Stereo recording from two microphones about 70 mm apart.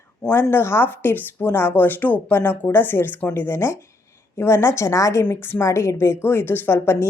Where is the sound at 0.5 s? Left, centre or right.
Left.